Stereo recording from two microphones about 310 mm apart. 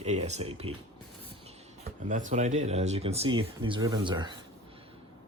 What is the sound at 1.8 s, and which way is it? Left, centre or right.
Speech, right.